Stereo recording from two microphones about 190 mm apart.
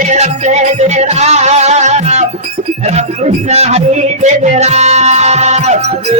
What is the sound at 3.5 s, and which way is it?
Music, 35° right (ahead or behind).